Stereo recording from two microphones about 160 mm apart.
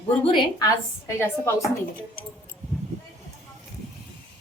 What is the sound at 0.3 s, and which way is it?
A woman's voice, 20° left (ahead or behind).